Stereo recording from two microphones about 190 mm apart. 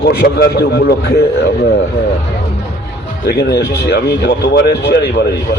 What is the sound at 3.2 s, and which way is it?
Speech, 60° left (ahead or behind).